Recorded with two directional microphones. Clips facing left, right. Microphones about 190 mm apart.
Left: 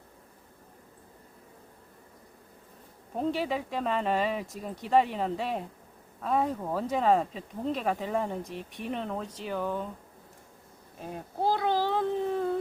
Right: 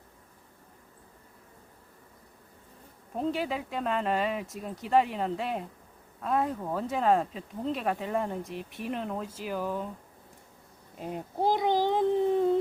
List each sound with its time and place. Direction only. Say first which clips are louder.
3.2 s speech: left 1 dB; centre (ahead or behind)
10.9 s a child's voice: right 2 dB; 20° right (ahead or behind)